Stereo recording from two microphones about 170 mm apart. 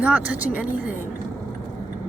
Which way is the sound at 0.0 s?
10° right (ahead or behind).